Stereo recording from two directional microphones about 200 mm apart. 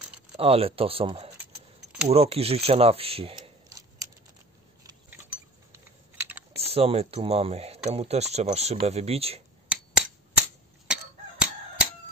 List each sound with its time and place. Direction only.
0.4 s speech: 30° right (ahead or behind)
1.4 s keys jangling: 5° right (ahead or behind)
2.0 s speech: 30° right (ahead or behind)
3.6 s scissors: 15° right (ahead or behind)
5.7 s typing: 10° right (ahead or behind)
6.6 s speech: 30° right (ahead or behind)
10.9 s fowl: 5° right (ahead or behind)